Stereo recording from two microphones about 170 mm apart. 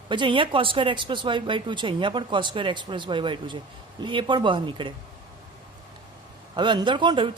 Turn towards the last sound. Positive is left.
turn(degrees=-30)  # may be behind; listen again after turning